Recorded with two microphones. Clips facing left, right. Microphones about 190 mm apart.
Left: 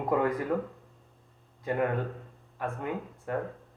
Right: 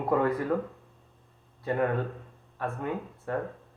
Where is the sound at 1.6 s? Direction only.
15° left (ahead or behind).